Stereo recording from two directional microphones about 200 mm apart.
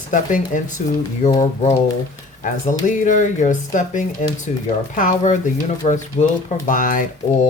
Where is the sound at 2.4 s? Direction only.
40° left (ahead or behind).